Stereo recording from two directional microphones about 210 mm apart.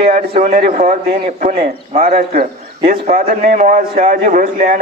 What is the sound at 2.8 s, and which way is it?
A man's voice, 40° right (ahead or behind).